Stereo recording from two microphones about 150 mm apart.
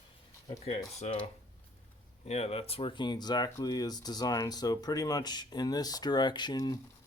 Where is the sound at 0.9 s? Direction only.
45° left (ahead or behind).